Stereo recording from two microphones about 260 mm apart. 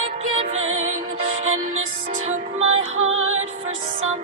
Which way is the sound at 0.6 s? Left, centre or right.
Right.